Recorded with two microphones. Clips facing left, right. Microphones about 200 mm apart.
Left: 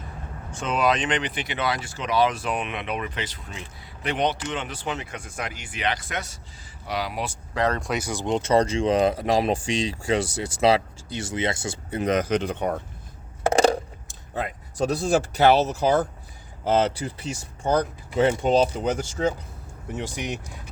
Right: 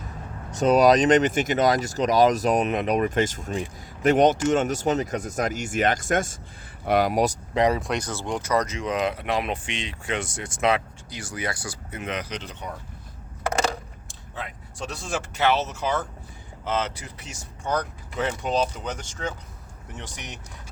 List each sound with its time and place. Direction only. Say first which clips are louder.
0.5 s speech: right 7 dB; 40° right (ahead or behind)
7.5 s speech: right 2 dB; 15° right (ahead or behind)
7.8 s speech: left 1 dB; 5° left (ahead or behind); by 12.8 s 55° left (ahead or behind)
13.4 s a sound: left 6 dB; 25° left (ahead or behind)
14.1 s speech: left 7 dB; 45° left (ahead or behind)
18.9 s speech: left 8 dB; 10° left (ahead or behind)